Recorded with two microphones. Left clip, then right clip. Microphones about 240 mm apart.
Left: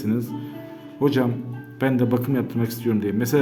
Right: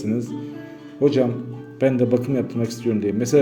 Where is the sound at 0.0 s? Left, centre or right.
Centre.